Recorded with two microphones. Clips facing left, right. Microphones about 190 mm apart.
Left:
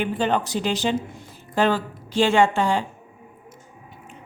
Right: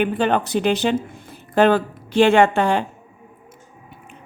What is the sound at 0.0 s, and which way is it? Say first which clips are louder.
A woman's voice: right 4 dB; 60° right (ahead or behind).